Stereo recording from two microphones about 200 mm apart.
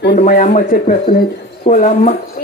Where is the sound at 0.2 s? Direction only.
35° left (ahead or behind).